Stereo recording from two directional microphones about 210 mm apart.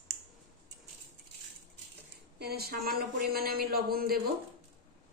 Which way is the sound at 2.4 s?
50° right (ahead or behind).